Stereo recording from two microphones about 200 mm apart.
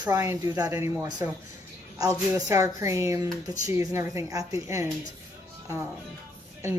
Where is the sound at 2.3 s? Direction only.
15° right (ahead or behind).